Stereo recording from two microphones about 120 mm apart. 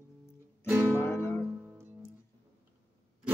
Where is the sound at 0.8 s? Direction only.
20° left (ahead or behind).